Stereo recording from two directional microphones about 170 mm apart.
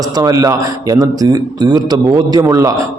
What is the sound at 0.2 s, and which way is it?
A man's voice, 20° right (ahead or behind).